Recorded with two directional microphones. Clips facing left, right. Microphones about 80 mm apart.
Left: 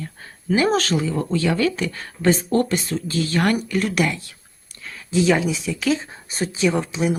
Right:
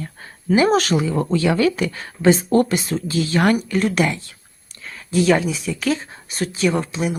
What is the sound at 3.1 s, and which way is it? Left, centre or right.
Speech, centre.